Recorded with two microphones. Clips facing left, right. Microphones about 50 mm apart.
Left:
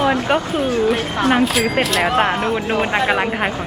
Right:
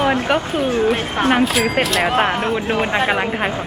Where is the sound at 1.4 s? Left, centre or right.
Centre.